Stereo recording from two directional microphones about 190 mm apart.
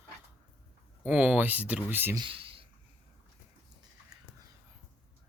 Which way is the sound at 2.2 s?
30° right (ahead or behind).